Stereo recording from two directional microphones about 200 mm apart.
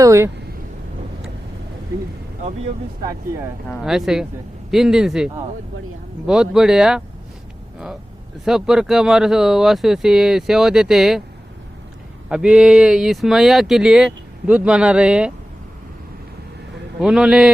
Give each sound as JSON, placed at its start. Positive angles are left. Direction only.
{"t": 0.0, "sound": "speech", "side_deg": -15}
{"t": 3.7, "sound": "speech", "side_deg": 0}
{"t": 8.4, "sound": "speech", "side_deg": 0}
{"t": 12.3, "sound": "speech", "side_deg": -5}
{"t": 17.0, "sound": "speech", "side_deg": -5}